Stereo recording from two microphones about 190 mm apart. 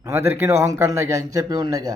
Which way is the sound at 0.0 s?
15° right (ahead or behind).